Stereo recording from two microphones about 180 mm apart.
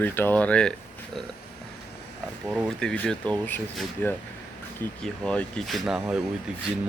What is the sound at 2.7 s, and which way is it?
Speech, 5° left (ahead or behind).